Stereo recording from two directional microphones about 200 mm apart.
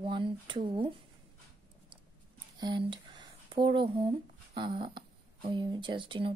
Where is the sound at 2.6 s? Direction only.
20° right (ahead or behind).